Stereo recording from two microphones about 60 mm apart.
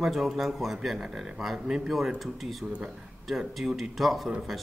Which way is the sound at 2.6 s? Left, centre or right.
Centre.